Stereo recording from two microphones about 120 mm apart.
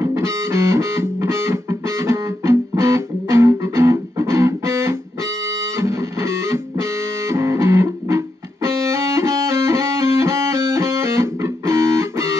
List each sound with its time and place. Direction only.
0.0 s music: 25° right (ahead or behind)